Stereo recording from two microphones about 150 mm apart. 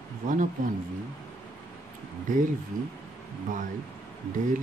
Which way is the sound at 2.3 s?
60° right (ahead or behind).